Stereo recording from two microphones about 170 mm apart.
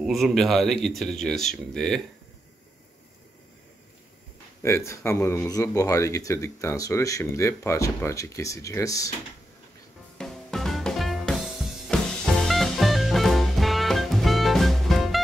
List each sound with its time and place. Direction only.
0.0 s speech: centre (ahead or behind)
4.6 s speech: 15° left (ahead or behind)
10.1 s music: 5° left (ahead or behind)